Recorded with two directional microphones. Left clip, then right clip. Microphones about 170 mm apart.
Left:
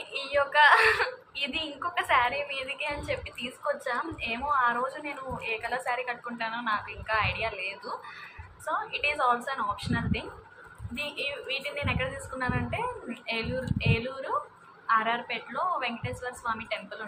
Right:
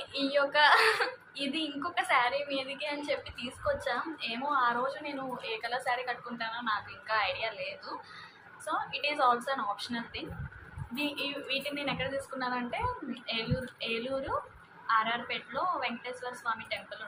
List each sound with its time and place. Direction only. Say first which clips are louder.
0.1 s a woman's voice: left 2 dB; 20° left (ahead or behind)